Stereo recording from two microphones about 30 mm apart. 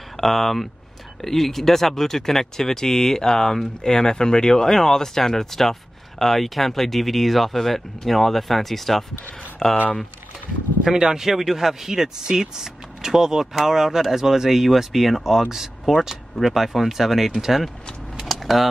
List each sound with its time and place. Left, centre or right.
0.2 s speech: centre
11.0 s speech: right
11.2 s speech: centre
18.2 s keys jangling: centre